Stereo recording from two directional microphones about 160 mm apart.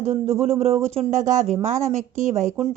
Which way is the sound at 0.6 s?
40° right (ahead or behind).